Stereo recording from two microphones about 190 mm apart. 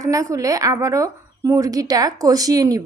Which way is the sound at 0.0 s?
15° right (ahead or behind).